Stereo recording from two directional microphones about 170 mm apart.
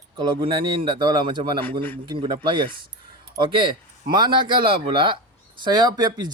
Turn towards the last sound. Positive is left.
turn(degrees=-25)  # may be behind; listen again after turning